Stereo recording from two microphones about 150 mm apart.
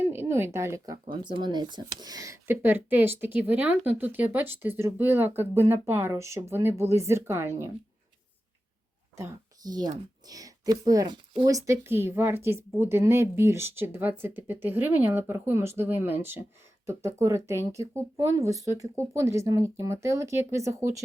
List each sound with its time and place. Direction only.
0.1 s speech: 15° right (ahead or behind)
1.1 s speech: 30° right (ahead or behind)
9.1 s speech: 20° right (ahead or behind)